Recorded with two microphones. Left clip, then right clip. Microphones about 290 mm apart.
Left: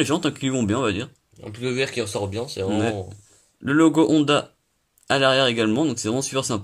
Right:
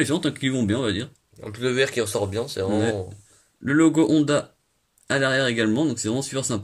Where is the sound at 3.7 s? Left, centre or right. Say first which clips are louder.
Left 1 dB; centre.